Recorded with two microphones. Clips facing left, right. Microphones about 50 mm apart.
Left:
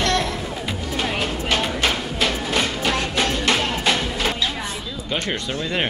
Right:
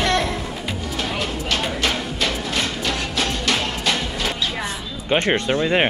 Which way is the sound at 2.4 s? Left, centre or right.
Centre.